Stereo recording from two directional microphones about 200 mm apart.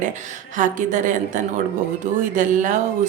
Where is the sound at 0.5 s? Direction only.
40° right (ahead or behind).